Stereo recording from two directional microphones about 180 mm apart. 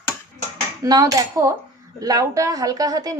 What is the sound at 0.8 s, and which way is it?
A woman's voice, 20° right (ahead or behind).